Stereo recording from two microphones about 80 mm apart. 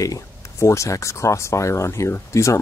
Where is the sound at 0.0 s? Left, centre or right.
Left.